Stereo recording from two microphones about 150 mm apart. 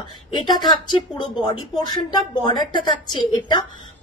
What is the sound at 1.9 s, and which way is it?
A woman's voice, 30° left (ahead or behind).